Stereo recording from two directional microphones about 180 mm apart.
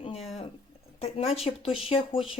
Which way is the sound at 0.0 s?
35° left (ahead or behind).